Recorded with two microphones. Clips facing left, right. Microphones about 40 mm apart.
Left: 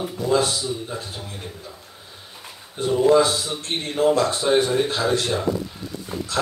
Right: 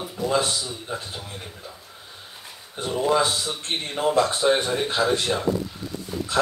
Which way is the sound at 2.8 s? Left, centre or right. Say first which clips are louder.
Left 5 dB; centre.